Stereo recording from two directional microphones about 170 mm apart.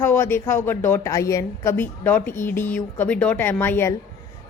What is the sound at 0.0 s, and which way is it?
A woman's voice, 15° left (ahead or behind).